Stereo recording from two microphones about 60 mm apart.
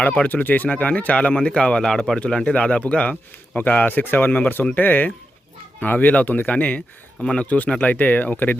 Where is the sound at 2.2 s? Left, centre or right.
Centre.